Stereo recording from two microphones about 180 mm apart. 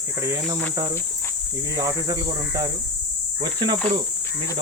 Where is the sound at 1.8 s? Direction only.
20° right (ahead or behind).